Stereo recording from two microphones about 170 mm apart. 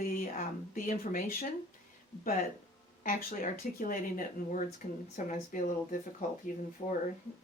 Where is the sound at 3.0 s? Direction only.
55° left (ahead or behind).